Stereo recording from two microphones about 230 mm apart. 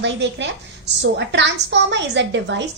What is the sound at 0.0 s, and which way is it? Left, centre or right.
A woman's voice, right.